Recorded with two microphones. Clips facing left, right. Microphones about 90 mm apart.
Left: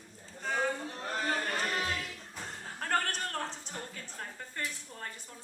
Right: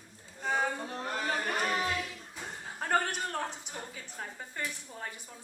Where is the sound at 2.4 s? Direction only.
15° right (ahead or behind).